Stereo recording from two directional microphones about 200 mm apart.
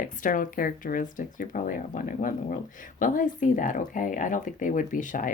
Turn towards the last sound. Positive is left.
turn(degrees=40)  # may be behind; listen again after turning